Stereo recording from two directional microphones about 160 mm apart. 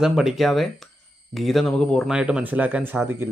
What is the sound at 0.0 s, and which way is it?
Speech, centre (ahead or behind).